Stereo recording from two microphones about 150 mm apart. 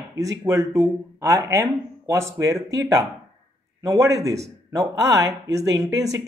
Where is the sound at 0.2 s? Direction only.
25° right (ahead or behind).